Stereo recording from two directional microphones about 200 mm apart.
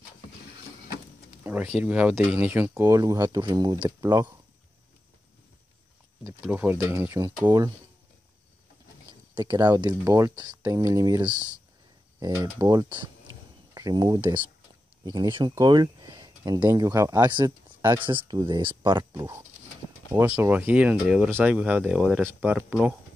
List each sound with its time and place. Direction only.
1.4 s speech: 10° right (ahead or behind)
6.2 s speech: 10° right (ahead or behind)
9.3 s speech: 20° right (ahead or behind)